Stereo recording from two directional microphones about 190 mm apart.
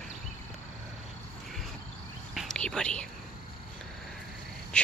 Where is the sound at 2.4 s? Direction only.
5° left (ahead or behind).